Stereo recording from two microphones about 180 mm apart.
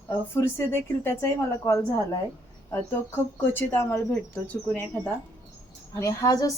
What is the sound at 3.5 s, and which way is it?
Speech, 10° left (ahead or behind).